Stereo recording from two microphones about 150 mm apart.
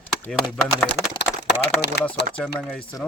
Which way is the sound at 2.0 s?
90° left.